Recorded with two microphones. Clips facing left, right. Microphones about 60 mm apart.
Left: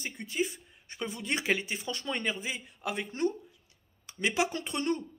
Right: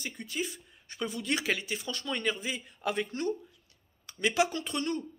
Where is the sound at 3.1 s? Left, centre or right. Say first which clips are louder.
Left 2 dB; left.